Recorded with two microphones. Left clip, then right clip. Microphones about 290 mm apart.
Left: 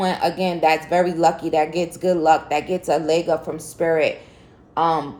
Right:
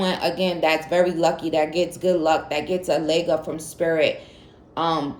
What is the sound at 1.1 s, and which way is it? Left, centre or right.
Speech, left.